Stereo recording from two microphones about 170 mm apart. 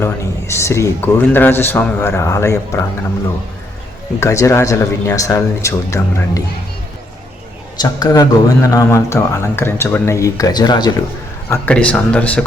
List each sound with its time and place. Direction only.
0.0 s speech: 15° left (ahead or behind)
4.2 s speech: 15° left (ahead or behind)
7.8 s a man's voice: 20° left (ahead or behind)
11.4 s speech: 10° left (ahead or behind)